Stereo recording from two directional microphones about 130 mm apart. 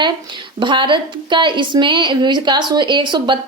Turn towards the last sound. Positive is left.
turn(degrees=-35)  # may be behind; listen again after turning